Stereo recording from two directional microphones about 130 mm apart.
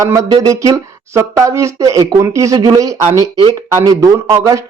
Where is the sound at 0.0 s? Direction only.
25° right (ahead or behind).